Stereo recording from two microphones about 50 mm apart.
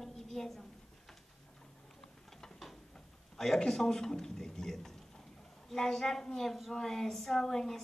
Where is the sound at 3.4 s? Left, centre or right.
Centre.